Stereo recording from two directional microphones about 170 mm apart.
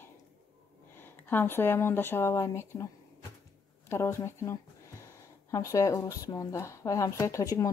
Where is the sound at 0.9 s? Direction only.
10° left (ahead or behind).